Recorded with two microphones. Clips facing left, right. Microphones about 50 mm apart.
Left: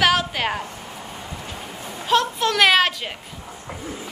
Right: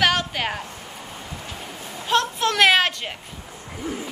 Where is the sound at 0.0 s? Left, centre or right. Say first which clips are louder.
Left 2 dB; centre.